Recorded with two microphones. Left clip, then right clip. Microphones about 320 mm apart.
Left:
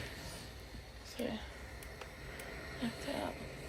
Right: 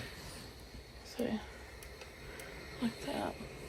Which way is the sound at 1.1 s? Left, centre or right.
Centre.